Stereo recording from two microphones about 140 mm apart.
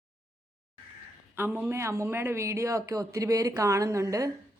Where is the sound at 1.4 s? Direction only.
15° right (ahead or behind).